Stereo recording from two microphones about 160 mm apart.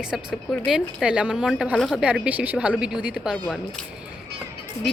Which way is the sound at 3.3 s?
5° left (ahead or behind).